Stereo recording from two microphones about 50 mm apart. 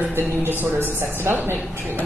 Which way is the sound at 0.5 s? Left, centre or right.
Right.